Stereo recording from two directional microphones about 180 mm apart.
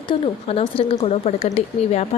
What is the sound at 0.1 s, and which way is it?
A woman's voice, 35° left (ahead or behind).